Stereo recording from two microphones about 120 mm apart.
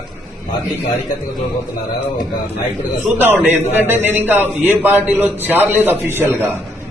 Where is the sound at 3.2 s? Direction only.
15° right (ahead or behind).